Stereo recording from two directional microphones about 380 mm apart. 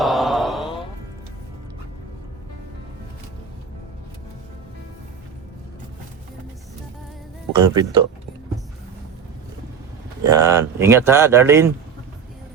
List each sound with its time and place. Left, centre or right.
0.0 s mantra: centre
7.5 s speech: centre
10.2 s speech: centre